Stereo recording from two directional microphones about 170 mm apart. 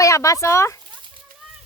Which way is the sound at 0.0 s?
20° left (ahead or behind).